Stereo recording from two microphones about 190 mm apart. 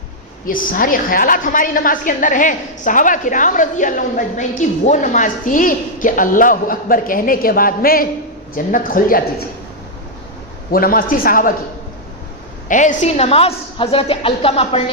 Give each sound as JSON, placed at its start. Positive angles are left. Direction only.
{"t": 0.4, "sound": "a woman's voice", "side_deg": 45}
{"t": 10.7, "sound": "a woman's voice", "side_deg": 50}
{"t": 12.6, "sound": "a woman's voice", "side_deg": 40}